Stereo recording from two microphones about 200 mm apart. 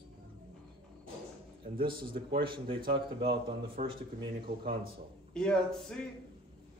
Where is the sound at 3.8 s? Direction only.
35° right (ahead or behind).